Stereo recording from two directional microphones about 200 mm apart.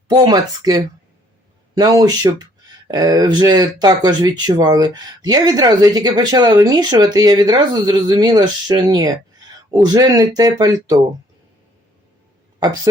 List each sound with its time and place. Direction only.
0.1 s speech: 20° right (ahead or behind)
12.5 s speech: 20° right (ahead or behind)